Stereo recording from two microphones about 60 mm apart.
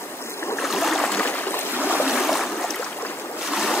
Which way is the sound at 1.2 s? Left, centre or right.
Left.